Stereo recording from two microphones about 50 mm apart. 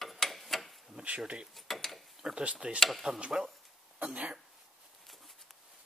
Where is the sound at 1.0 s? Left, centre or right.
Right.